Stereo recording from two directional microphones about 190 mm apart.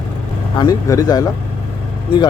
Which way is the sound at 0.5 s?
20° left (ahead or behind).